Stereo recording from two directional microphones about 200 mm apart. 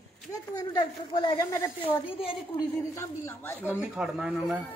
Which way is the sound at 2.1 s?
25° left (ahead or behind).